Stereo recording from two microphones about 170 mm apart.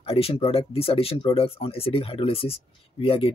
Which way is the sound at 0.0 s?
35° left (ahead or behind).